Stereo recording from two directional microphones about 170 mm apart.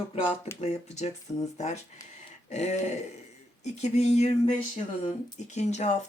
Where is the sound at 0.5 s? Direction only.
40° left (ahead or behind).